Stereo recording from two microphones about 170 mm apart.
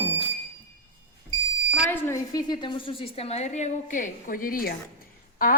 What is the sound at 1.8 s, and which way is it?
A woman's voice, 15° left (ahead or behind).